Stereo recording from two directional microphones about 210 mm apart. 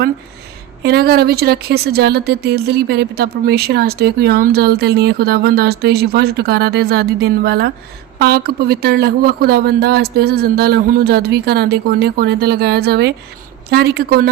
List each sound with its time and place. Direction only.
0.8 s speech: 50° right (ahead or behind)